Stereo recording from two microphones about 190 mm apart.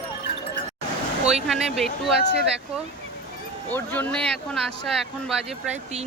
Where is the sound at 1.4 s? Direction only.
Centre (ahead or behind).